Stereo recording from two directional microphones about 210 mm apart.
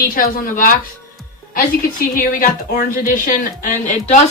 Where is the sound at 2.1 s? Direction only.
40° left (ahead or behind).